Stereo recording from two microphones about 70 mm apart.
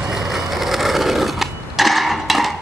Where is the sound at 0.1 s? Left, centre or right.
Centre.